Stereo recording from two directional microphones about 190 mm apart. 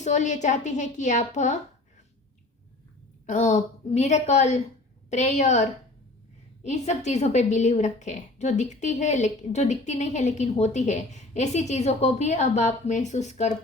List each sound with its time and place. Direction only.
0.0 s a woman's voice: 40° left (ahead or behind)
3.2 s a woman's voice: 40° left (ahead or behind)